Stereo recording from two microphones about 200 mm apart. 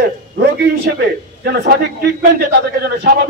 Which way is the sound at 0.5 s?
50° right (ahead or behind).